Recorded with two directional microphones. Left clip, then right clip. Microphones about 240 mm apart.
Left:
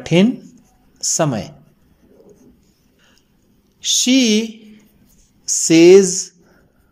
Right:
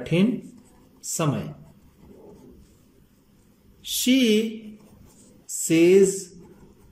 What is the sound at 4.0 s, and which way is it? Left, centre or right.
Speech, centre.